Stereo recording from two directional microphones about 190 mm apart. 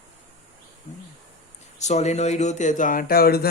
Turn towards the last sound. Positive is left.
turn(degrees=55)  # may be behind; listen again after turning